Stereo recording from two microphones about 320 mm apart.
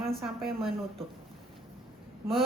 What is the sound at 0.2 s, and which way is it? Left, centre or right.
Speech, centre.